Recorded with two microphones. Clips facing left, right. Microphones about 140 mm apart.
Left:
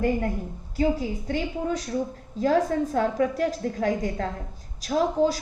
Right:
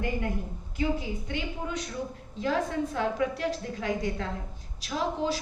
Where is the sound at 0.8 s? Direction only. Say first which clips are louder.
Left 5 dB; 40° left (ahead or behind).